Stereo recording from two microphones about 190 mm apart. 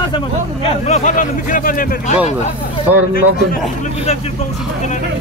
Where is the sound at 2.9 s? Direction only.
10° right (ahead or behind).